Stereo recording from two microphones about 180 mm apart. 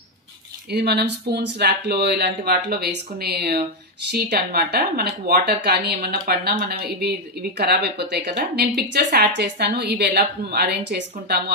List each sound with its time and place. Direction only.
0.7 s speech: 65° right (ahead or behind)